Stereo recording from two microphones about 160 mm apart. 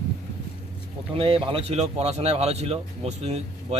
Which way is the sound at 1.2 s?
35° right (ahead or behind).